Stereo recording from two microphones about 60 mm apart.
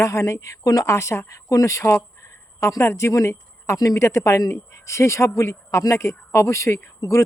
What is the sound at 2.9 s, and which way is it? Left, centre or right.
A man's voice, left.